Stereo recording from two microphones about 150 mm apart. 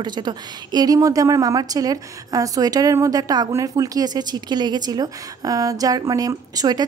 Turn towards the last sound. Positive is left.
turn(degrees=-25)  # may be behind; listen again after turning